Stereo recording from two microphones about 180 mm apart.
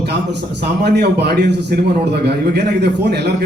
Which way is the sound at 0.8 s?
65° right (ahead or behind).